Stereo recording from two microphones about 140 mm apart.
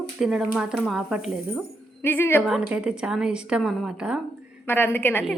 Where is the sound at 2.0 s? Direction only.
15° left (ahead or behind).